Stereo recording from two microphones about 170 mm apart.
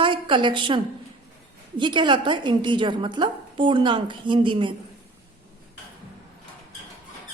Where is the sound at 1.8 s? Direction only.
25° right (ahead or behind).